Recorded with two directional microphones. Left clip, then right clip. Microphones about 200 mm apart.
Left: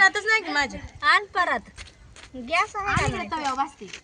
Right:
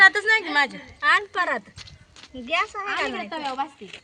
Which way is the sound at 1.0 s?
40° left (ahead or behind).